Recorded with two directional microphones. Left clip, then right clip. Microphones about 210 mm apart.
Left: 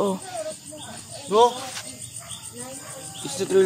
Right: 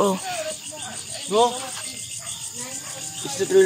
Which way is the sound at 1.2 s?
10° left (ahead or behind).